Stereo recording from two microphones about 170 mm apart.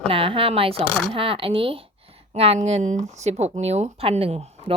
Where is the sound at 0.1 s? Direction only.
30° right (ahead or behind).